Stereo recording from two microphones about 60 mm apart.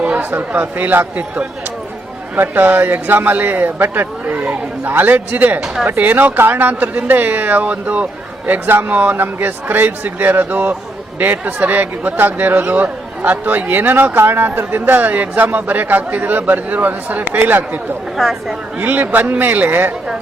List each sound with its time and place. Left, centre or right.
0.2 s speech: right
5.6 s speech: centre
6.0 s speech: right
18.2 s speech: centre
18.8 s speech: right